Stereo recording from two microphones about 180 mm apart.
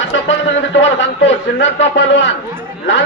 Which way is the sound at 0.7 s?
90° left.